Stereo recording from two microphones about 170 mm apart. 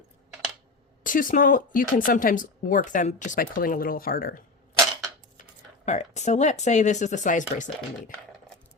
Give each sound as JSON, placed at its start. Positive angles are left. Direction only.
{"t": 1.0, "sound": "speech", "side_deg": 50}
{"t": 5.8, "sound": "speech", "side_deg": 45}